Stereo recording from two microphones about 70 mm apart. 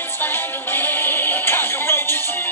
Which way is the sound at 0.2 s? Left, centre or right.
Left.